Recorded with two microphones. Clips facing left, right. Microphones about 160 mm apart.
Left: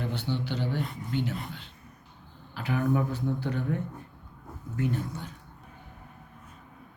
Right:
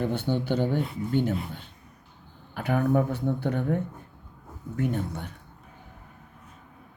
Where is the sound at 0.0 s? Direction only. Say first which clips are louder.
Right 5 dB; 50° right (ahead or behind).